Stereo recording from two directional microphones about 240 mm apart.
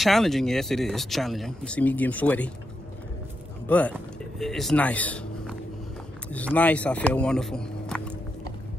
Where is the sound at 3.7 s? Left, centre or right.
Centre.